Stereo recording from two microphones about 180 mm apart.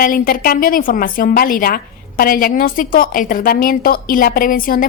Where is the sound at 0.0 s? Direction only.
50° left (ahead or behind).